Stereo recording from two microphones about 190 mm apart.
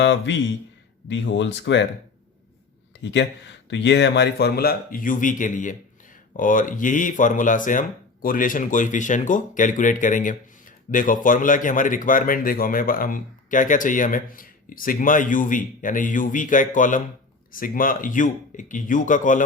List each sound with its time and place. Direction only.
0.0 s speech: 70° left (ahead or behind)
3.0 s speech: 70° left (ahead or behind); by 19.5 s 45° left (ahead or behind)